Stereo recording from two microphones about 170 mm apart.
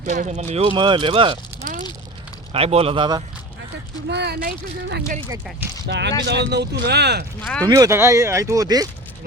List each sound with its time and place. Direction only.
0.0 s speech: 50° right (ahead or behind); by 1.4 s 30° right (ahead or behind)
2.5 s speech: 35° right (ahead or behind)
4.1 s speech: 75° right (ahead or behind)
5.8 s speech: 85° right
7.4 s speech: 10° left (ahead or behind)
7.7 s speech: 15° right (ahead or behind)